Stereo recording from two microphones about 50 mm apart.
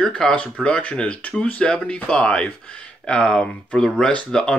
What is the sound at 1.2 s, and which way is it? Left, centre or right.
Speech, left.